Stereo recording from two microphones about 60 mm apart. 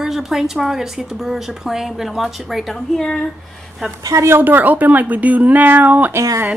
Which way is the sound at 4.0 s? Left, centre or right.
Right.